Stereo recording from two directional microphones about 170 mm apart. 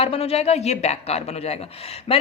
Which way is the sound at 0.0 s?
35° left (ahead or behind).